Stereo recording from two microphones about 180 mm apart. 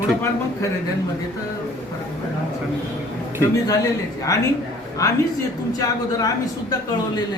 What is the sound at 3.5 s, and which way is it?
A man's voice, 20° left (ahead or behind).